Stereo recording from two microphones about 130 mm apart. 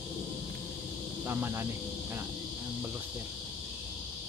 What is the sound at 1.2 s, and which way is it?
Speech, 20° right (ahead or behind).